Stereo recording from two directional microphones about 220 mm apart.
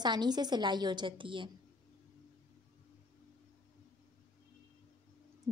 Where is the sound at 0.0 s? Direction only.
20° right (ahead or behind).